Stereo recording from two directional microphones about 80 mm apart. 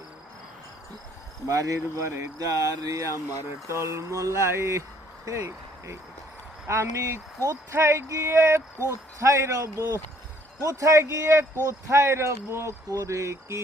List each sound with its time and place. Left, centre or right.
1.5 s speech: right